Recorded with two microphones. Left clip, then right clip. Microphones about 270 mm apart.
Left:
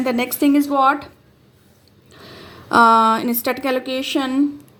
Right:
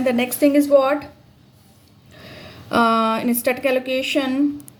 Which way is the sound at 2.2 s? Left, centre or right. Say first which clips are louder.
Left 2 dB; centre.